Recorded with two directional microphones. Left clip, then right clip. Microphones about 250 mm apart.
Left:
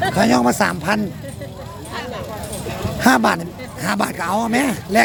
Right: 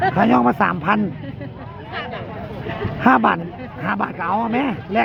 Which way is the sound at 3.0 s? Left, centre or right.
Centre.